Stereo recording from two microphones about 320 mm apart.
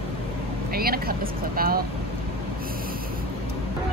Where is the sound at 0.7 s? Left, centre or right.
Right.